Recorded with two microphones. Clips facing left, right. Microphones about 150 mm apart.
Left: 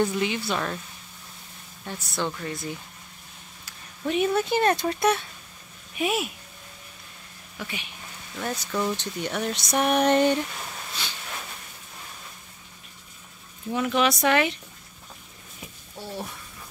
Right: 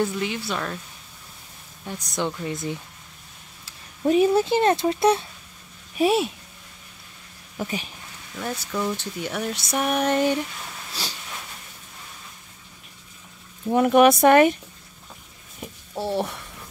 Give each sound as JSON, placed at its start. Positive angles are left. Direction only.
{"t": 0.0, "sound": "speech", "side_deg": 0}
{"t": 1.9, "sound": "speech", "side_deg": -15}
{"t": 4.0, "sound": "speech", "side_deg": -30}
{"t": 7.5, "sound": "speech", "side_deg": -40}
{"t": 8.4, "sound": "speech", "side_deg": -5}
{"t": 11.0, "sound": "speech", "side_deg": -35}
{"t": 13.7, "sound": "speech", "side_deg": -50}
{"t": 16.0, "sound": "speech", "side_deg": -90}